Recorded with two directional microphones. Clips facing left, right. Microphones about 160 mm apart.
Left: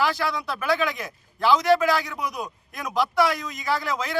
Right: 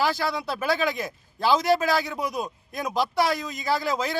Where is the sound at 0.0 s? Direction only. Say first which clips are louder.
Even; 30° right (ahead or behind).